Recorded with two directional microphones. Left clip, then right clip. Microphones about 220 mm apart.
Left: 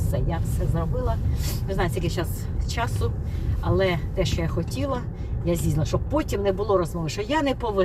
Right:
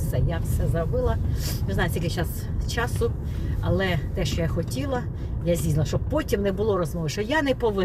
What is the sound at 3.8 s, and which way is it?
Speech, 15° right (ahead or behind).